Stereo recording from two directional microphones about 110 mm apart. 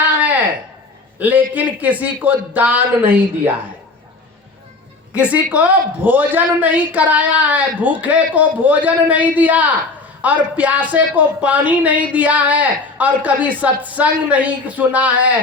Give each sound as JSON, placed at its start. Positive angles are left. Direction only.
{"t": 1.2, "sound": "speech", "side_deg": -15}
{"t": 5.1, "sound": "speech", "side_deg": -10}